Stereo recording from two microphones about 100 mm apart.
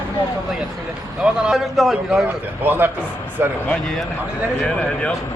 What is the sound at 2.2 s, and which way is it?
Speech, 20° right (ahead or behind).